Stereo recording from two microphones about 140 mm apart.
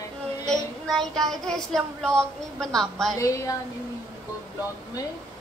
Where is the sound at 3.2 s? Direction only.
25° left (ahead or behind).